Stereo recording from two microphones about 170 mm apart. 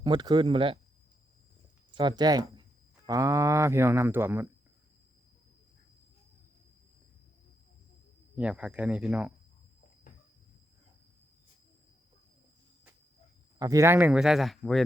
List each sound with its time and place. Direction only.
0.0 s speech: 25° right (ahead or behind)
1.9 s speech: 30° right (ahead or behind)
8.4 s speech: 5° right (ahead or behind)
13.6 s speech: 20° right (ahead or behind); by 14.8 s centre (ahead or behind)